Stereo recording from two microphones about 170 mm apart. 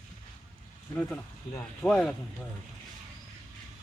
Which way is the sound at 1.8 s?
5° left (ahead or behind).